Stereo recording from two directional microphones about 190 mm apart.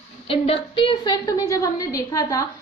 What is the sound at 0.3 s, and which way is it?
A woman's voice, 30° left (ahead or behind).